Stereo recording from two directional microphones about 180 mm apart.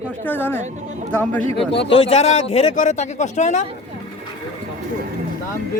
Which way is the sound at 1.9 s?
30° left (ahead or behind).